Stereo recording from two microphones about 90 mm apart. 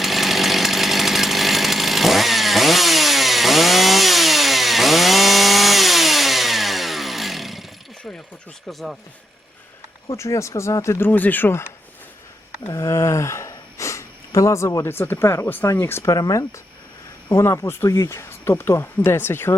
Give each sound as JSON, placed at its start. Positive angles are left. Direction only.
{"t": 0.0, "sound": "chainsaw", "side_deg": 0}
{"t": 8.6, "sound": "speech", "side_deg": 0}
{"t": 10.1, "sound": "speech", "side_deg": 35}
{"t": 12.6, "sound": "speech", "side_deg": 35}
{"t": 14.8, "sound": "speech", "side_deg": 25}
{"t": 16.1, "sound": "speech", "side_deg": 45}